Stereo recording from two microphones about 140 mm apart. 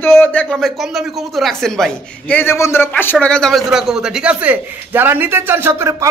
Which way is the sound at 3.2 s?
5° left (ahead or behind).